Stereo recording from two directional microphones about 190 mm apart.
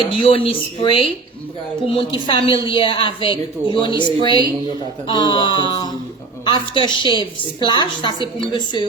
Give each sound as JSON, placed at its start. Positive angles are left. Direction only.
{"t": 0.0, "sound": "a woman's voice", "side_deg": 30}
{"t": 5.4, "sound": "a sound", "side_deg": -20}
{"t": 6.4, "sound": "a woman's voice", "side_deg": 25}